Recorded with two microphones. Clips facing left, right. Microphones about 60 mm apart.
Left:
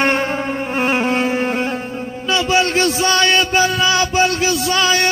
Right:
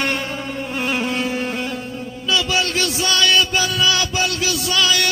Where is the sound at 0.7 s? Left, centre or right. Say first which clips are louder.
Left 5 dB; left.